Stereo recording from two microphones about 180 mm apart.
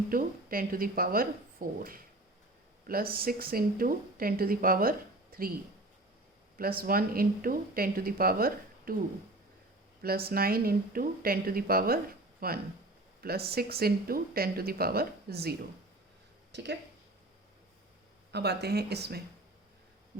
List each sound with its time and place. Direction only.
0.1 s speech: 50° right (ahead or behind)
6.6 s speech: 55° right (ahead or behind)
10.0 s speech: 55° right (ahead or behind)
16.5 s speech: 75° right (ahead or behind)
18.3 s speech: 65° right (ahead or behind)